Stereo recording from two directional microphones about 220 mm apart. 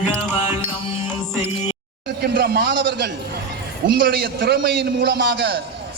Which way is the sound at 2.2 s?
50° right (ahead or behind).